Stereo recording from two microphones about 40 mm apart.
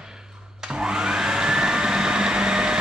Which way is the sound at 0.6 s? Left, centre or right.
Centre.